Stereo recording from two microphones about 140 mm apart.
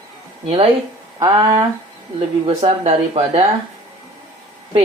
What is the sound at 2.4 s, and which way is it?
Speech, 45° right (ahead or behind).